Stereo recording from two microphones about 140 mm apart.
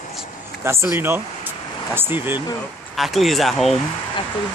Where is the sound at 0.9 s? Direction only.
15° right (ahead or behind).